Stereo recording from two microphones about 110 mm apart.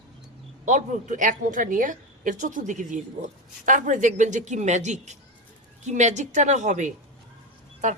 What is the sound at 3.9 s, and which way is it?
Speech, 90° right.